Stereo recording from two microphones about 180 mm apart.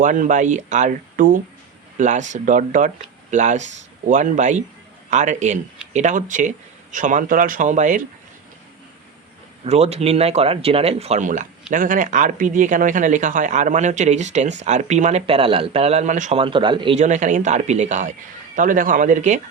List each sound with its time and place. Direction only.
0.0 s speech: 45° right (ahead or behind)
9.6 s a man's voice: 35° right (ahead or behind)
16.4 s speech: 25° right (ahead or behind)
17.0 s a man's voice: 40° right (ahead or behind)